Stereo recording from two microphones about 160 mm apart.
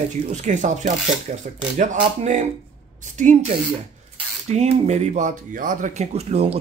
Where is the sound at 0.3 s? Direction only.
50° right (ahead or behind).